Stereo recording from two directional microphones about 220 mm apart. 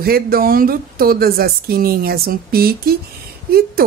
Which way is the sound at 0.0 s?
40° right (ahead or behind).